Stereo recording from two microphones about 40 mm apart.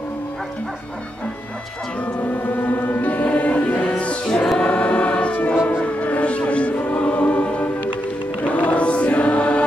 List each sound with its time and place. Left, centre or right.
2.4 s music: left
3.0 s music: left
4.6 s choir: left